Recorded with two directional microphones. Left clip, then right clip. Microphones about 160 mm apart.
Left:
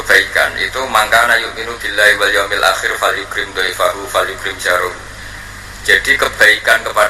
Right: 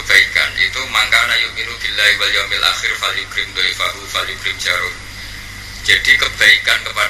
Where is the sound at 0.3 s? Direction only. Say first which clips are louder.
Left 1 dB; 40° left (ahead or behind).